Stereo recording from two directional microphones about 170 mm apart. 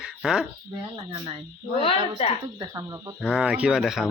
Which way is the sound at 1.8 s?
35° left (ahead or behind).